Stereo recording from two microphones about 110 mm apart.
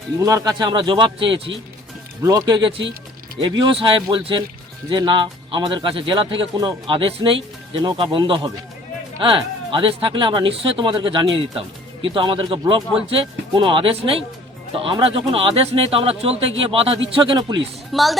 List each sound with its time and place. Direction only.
0.2 s speech: 30° right (ahead or behind); by 1.5 s 50° right (ahead or behind)
2.2 s speech: 35° right (ahead or behind)
9.2 s speech: 50° right (ahead or behind)
17.9 s speech: centre (ahead or behind)